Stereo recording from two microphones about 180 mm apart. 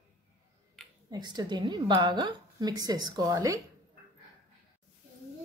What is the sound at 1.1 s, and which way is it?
Speech, 25° right (ahead or behind).